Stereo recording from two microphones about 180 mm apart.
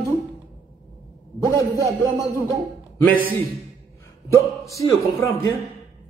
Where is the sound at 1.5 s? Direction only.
15° right (ahead or behind).